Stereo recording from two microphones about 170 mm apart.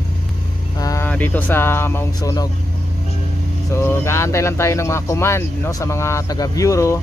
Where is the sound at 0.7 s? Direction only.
20° left (ahead or behind).